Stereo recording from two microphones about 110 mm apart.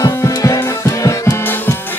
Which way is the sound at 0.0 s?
30° left (ahead or behind).